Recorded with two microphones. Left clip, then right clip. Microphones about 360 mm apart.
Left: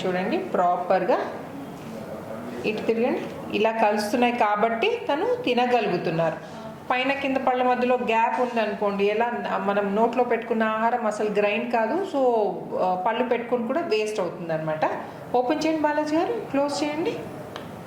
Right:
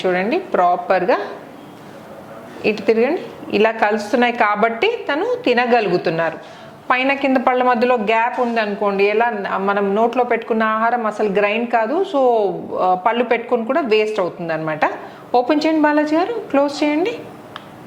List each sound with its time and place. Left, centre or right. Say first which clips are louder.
0.0 s a woman's voice: right 7 dB; right
2.6 s a woman's voice: right 8 dB; right
6.8 s a woman's voice: right 7 dB; right